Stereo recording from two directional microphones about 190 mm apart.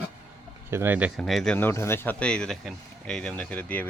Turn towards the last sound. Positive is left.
turn(degrees=10)  # may be behind; listen again after turning